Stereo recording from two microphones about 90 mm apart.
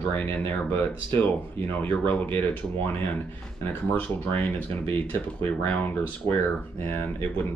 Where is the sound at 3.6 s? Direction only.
25° left (ahead or behind).